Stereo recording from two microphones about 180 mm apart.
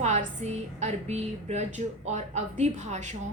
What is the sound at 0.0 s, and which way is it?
A woman's voice, 40° right (ahead or behind).